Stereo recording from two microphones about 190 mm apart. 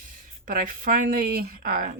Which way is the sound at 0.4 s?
45° right (ahead or behind).